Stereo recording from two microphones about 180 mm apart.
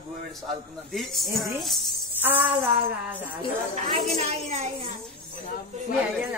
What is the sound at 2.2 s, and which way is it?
Music, 10° right (ahead or behind).